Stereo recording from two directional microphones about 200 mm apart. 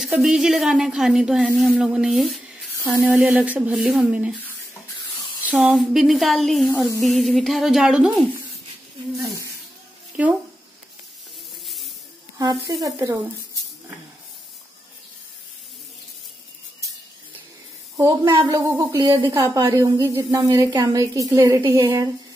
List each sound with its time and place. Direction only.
0.0 s speech: 5° right (ahead or behind)
5.5 s speech: 5° right (ahead or behind)
10.2 s speech: 5° right (ahead or behind)
11.6 s spray: centre (ahead or behind)
12.4 s a woman's voice: 20° right (ahead or behind)
17.9 s a woman's voice: 20° right (ahead or behind)